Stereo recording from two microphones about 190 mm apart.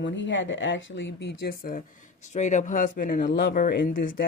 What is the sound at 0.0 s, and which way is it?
Speech, 70° left (ahead or behind).